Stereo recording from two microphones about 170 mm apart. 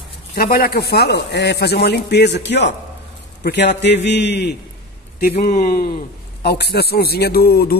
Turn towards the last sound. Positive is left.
turn(degrees=65)  # may be behind; listen again after turning